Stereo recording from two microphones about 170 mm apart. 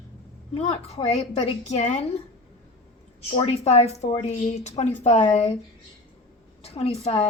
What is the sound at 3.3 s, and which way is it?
A woman's voice, 35° left (ahead or behind).